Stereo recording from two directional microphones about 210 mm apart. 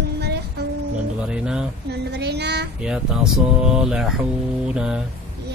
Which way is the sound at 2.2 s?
55° right (ahead or behind).